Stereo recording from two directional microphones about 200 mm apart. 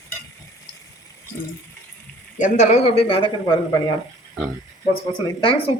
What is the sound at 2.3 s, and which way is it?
A man's voice, 40° left (ahead or behind).